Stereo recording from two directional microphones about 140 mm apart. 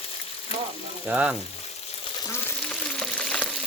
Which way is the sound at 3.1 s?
10° left (ahead or behind).